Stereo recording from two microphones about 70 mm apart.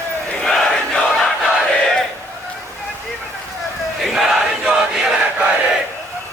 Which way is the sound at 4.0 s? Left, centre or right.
Centre.